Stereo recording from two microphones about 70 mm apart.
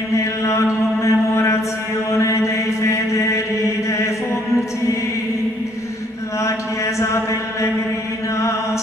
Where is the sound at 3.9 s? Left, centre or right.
Left.